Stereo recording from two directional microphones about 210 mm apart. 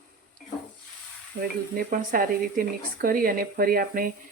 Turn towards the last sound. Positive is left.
turn(degrees=-45)  # may be behind; listen again after turning